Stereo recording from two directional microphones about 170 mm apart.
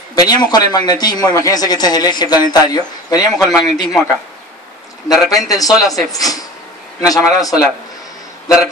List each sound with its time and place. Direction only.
0.1 s speech: 25° left (ahead or behind)
5.3 s speech: 20° left (ahead or behind)